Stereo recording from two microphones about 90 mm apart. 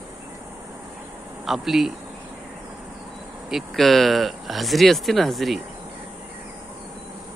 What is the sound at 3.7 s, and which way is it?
Speech, 5° left (ahead or behind).